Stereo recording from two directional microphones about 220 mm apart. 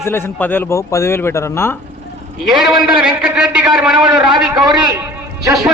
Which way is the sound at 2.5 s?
Centre (ahead or behind).